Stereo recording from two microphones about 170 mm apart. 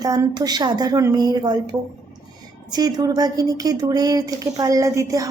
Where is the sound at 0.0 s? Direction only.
20° right (ahead or behind).